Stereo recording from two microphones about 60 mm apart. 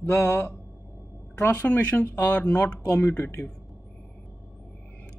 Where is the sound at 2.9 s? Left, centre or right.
Left.